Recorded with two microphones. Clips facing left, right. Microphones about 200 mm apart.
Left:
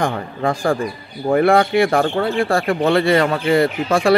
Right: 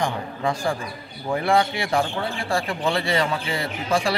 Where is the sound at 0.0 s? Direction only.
55° left (ahead or behind).